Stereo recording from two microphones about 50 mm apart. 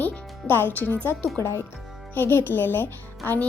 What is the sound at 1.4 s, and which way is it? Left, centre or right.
Speech, left.